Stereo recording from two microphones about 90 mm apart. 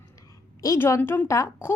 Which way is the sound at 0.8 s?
30° left (ahead or behind).